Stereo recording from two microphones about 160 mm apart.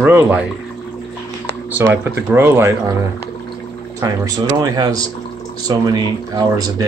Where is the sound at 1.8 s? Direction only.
15° right (ahead or behind).